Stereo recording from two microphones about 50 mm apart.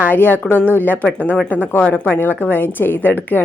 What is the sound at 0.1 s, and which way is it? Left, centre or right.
A woman's voice, left.